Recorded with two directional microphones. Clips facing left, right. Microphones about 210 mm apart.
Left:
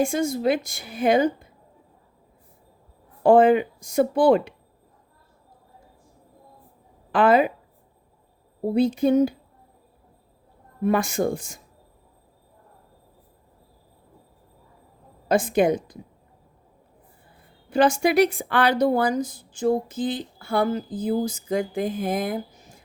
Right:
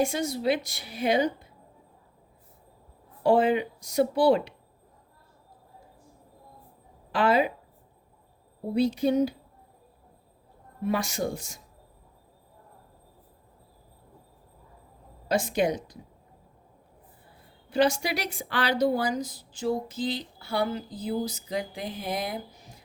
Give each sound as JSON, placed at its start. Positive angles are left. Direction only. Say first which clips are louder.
{"t": 0.0, "sound": "speech", "louder": "left 4 dB", "side_deg": 50}
{"t": 3.2, "sound": "speech", "louder": "left 6 dB", "side_deg": 50}
{"t": 7.1, "sound": "speech", "louder": "left 5 dB", "side_deg": 55}
{"t": 8.7, "sound": "speech", "louder": "left 4 dB", "side_deg": 50}
{"t": 10.8, "sound": "speech", "louder": "left 6 dB", "side_deg": 50}
{"t": 15.3, "sound": "speech", "louder": "left 6 dB", "side_deg": 55}
{"t": 17.7, "sound": "speech", "louder": "left 5 dB", "side_deg": 50}